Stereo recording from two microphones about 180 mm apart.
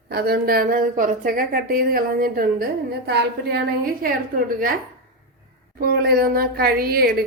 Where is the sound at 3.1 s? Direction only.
65° right (ahead or behind).